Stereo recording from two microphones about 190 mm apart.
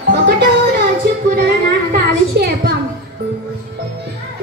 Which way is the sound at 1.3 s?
55° right (ahead or behind).